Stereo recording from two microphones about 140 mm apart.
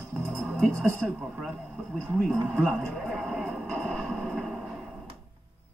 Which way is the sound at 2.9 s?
Centre (ahead or behind).